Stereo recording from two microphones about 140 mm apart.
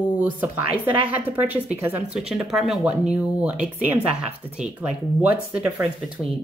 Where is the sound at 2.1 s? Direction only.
5° right (ahead or behind).